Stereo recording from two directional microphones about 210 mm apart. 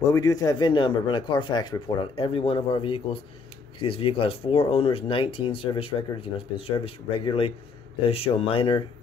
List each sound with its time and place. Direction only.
0.1 s speech: 15° left (ahead or behind)